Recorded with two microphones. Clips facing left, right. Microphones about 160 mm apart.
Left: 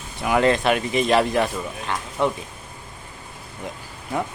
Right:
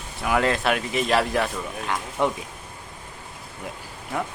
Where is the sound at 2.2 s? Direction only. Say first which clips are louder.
Left 1 dB; 15° right (ahead or behind).